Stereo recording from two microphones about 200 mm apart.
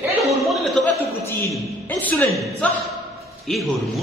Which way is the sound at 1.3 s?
10° left (ahead or behind).